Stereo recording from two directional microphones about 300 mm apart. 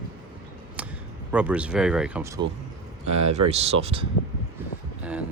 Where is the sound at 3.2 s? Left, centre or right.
Right.